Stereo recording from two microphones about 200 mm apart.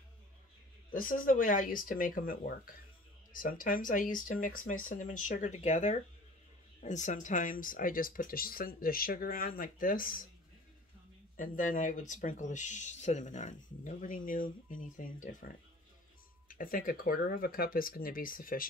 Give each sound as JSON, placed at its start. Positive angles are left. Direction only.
{"t": 0.9, "sound": "speech", "side_deg": 45}
{"t": 11.3, "sound": "speech", "side_deg": 40}